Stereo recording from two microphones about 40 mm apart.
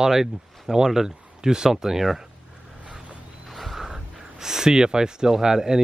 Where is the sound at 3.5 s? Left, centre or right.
Centre.